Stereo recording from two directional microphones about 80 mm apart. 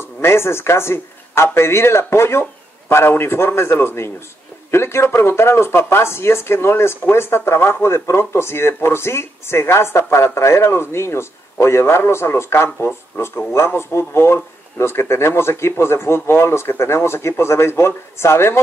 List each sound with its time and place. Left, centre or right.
0.2 s a man's voice: left